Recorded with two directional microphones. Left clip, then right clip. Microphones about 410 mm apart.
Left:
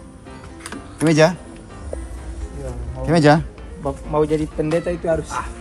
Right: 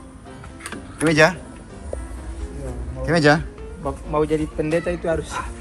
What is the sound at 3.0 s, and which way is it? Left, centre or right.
Speech, centre.